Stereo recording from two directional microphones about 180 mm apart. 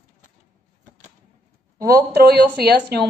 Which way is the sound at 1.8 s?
20° right (ahead or behind).